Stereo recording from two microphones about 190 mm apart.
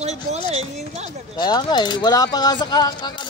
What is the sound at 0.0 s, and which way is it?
Speech, 35° right (ahead or behind).